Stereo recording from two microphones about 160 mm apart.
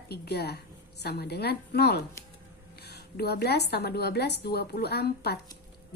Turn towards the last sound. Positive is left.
turn(degrees=90)